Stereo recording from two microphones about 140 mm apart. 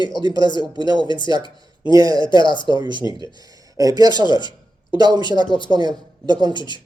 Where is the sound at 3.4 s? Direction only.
25° right (ahead or behind).